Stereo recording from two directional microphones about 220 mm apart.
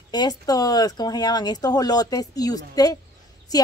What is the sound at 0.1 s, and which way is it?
A woman's voice, 15° left (ahead or behind).